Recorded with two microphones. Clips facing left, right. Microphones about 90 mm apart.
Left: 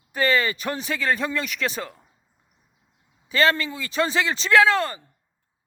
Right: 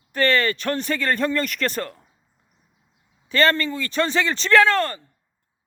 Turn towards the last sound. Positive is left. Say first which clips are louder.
# right 1 dB
turn(degrees=5)  # may be behind; listen again after turning